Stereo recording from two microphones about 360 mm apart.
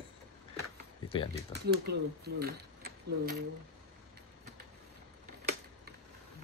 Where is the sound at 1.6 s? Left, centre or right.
Right.